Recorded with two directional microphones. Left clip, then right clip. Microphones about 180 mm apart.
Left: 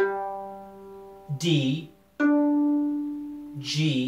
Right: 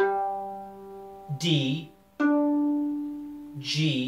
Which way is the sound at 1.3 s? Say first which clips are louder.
Left 1 dB; 15° left (ahead or behind).